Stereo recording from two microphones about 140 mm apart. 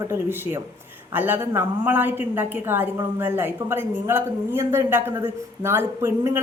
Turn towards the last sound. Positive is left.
turn(degrees=-20)  # may be behind; listen again after turning